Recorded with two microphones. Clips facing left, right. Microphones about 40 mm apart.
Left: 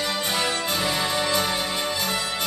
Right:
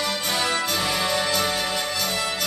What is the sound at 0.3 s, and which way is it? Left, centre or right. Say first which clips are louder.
Music: right 3 dB; centre.